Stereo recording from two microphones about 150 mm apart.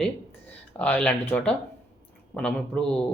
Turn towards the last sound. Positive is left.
turn(degrees=5)  # may be behind; listen again after turning